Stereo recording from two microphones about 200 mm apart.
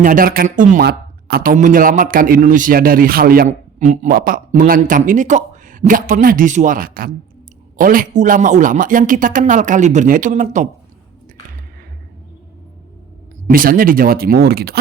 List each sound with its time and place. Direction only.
0.0 s speech: 45° right (ahead or behind)
13.5 s speech: 45° right (ahead or behind)